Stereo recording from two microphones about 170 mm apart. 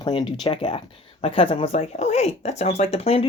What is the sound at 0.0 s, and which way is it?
Speech, 30° left (ahead or behind).